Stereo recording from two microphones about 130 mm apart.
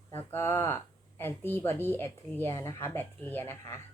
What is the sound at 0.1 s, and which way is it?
A woman's voice, 20° left (ahead or behind).